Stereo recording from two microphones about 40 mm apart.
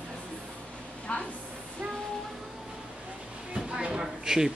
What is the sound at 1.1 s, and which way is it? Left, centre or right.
Speech, left.